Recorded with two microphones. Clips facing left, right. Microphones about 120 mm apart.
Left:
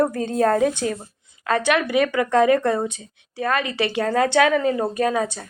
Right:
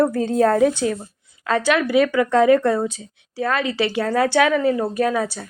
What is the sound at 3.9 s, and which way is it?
Speech, 15° left (ahead or behind).